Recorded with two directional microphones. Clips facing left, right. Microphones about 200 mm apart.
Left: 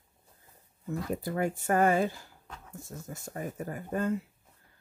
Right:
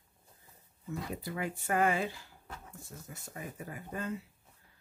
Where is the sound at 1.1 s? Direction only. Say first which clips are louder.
Left 9 dB; 45° left (ahead or behind).